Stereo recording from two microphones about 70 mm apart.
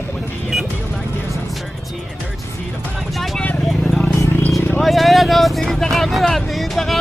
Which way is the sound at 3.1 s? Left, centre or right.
Centre.